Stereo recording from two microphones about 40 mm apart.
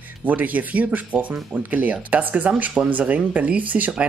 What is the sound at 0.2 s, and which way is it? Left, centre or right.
Speech, right.